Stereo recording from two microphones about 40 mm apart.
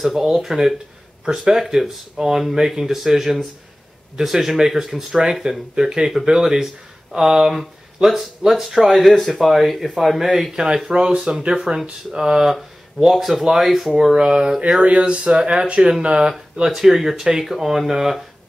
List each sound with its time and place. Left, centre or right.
0.0 s speech: centre
14.1 s speech: right
16.6 s speech: centre